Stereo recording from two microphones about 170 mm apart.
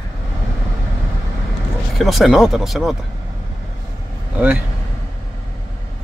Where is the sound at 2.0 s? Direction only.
Centre (ahead or behind).